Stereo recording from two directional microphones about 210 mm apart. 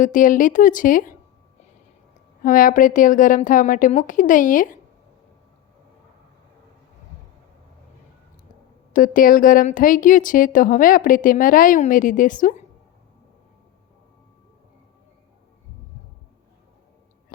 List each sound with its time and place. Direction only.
0.0 s speech: 40° left (ahead or behind)
2.4 s speech: 40° left (ahead or behind)
8.9 s speech: 40° left (ahead or behind)